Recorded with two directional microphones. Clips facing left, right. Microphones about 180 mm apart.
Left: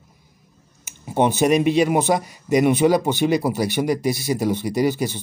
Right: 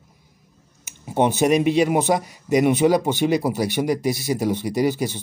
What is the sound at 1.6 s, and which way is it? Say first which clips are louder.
Speech: left 1 dB; 20° right (ahead or behind).